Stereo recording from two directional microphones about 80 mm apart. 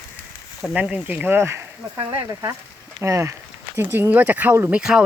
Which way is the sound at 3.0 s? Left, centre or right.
Right.